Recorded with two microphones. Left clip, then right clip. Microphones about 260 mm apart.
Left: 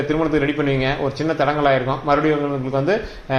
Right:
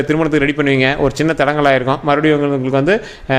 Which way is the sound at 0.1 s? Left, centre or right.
Right.